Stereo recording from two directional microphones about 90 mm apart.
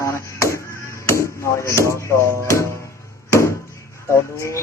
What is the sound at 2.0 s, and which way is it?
Music, 35° left (ahead or behind).